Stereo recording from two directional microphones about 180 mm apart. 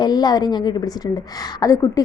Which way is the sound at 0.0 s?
20° left (ahead or behind).